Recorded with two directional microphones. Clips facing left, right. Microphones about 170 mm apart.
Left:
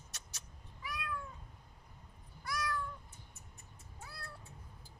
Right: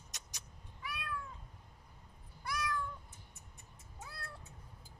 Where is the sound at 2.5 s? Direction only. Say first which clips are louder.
Even; 20° right (ahead or behind).